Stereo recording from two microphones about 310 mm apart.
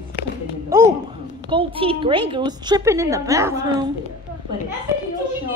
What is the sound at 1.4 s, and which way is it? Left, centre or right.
A woman's voice, centre.